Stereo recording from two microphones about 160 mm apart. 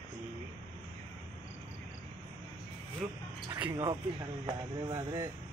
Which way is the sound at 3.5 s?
20° right (ahead or behind).